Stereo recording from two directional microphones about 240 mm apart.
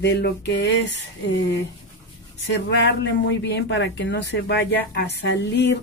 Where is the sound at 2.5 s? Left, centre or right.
Left.